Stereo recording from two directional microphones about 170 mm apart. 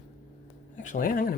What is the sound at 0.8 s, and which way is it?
Speech, 50° left (ahead or behind).